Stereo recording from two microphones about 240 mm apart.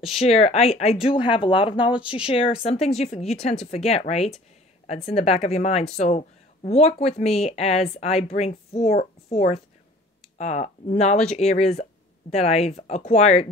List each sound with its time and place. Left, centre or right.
0.2 s speech: left